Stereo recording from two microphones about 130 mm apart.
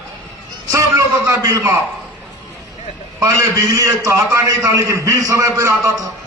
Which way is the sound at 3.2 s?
25° right (ahead or behind).